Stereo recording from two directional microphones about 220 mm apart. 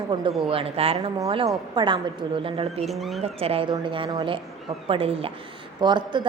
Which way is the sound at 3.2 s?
25° right (ahead or behind).